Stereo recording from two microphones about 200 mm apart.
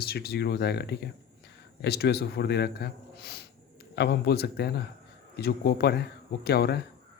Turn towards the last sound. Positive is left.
turn(degrees=55)  # may be behind; listen again after turning